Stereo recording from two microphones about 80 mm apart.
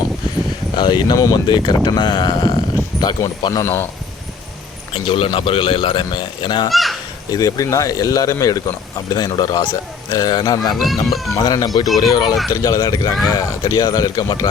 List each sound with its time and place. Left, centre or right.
0.8 s speech: left
2.9 s a sound: centre
3.5 s speech: left
4.9 s speech: left
6.7 s speech: centre
7.3 s speech: left
10.8 s speech: centre
11.3 s speech: left